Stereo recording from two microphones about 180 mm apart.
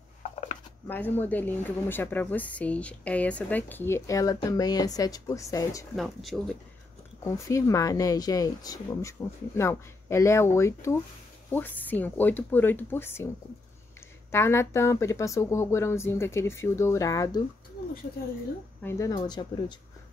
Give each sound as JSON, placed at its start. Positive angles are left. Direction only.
{"t": 0.8, "sound": "speech", "side_deg": 10}
{"t": 5.9, "sound": "speech", "side_deg": 0}
{"t": 7.2, "sound": "speech", "side_deg": 15}
{"t": 14.3, "sound": "speech", "side_deg": 15}
{"t": 18.8, "sound": "speech", "side_deg": 15}